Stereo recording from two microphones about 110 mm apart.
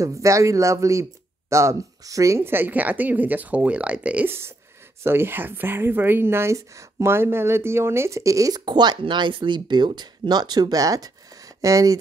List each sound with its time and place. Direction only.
0.0 s speech: 30° right (ahead or behind)